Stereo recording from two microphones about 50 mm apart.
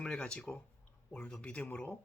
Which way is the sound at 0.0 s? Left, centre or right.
Left.